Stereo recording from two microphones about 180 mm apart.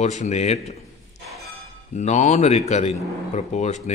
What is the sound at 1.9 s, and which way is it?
A man's voice, 40° left (ahead or behind).